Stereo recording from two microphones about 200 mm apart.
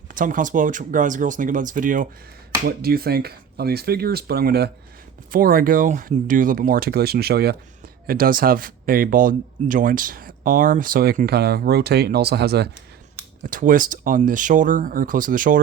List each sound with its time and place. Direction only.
0.1 s speech: 40° right (ahead or behind)
13.5 s speech: 40° right (ahead or behind)